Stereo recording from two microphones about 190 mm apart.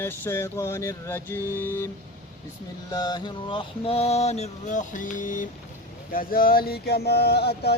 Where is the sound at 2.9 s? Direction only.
20° left (ahead or behind); by 5.4 s 45° left (ahead or behind).